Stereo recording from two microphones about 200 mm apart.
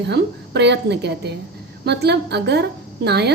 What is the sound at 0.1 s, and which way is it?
A woman's voice, 60° right (ahead or behind).